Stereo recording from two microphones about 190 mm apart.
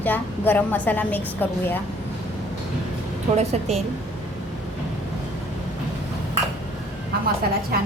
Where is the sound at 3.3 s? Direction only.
35° right (ahead or behind).